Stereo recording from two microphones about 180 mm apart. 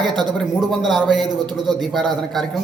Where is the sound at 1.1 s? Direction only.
25° right (ahead or behind).